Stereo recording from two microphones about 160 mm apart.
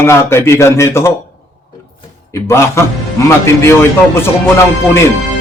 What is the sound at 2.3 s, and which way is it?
A man's voice, 15° left (ahead or behind).